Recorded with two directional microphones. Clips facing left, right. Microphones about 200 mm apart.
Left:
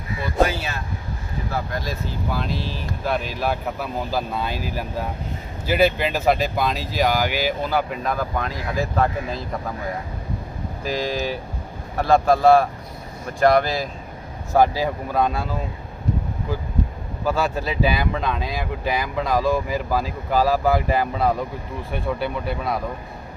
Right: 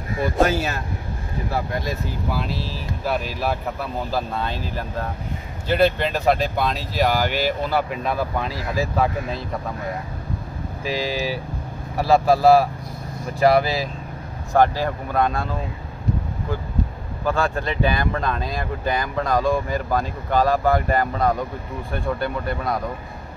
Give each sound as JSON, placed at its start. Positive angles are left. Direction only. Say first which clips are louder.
{"t": 0.1, "sound": "speech", "louder": "right 2 dB", "side_deg": -45}
{"t": 2.2, "sound": "speech", "louder": "left 1 dB", "side_deg": -5}
{"t": 10.8, "sound": "speech", "louder": "even", "side_deg": 0}
{"t": 14.5, "sound": "speech", "louder": "even", "side_deg": 10}
{"t": 17.2, "sound": "speech", "louder": "even", "side_deg": 5}